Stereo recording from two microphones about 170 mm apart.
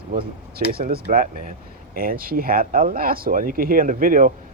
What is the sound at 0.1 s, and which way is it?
Speech, 60° right (ahead or behind).